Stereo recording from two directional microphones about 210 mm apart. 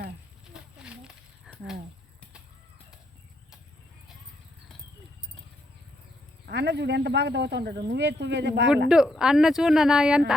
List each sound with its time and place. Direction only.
0.5 s a sound: 5° right (ahead or behind)
6.4 s speech: 55° right (ahead or behind)
8.9 s speech: 5° right (ahead or behind)